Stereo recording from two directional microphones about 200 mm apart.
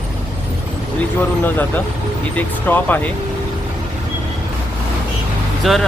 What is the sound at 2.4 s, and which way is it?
Speech, 10° left (ahead or behind).